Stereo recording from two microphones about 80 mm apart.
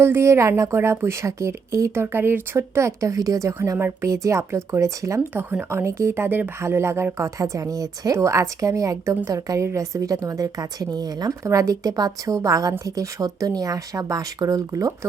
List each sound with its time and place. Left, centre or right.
0.0 s a woman's voice: right
5.3 s speech: right
5.7 s a woman's voice: right